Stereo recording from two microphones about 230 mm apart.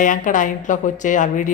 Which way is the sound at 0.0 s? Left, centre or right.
Left.